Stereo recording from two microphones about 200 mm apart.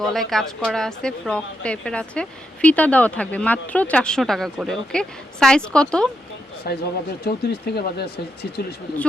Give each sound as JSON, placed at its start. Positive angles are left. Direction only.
{"t": 0.0, "sound": "a woman's voice", "side_deg": 0}
{"t": 6.7, "sound": "speech", "side_deg": 50}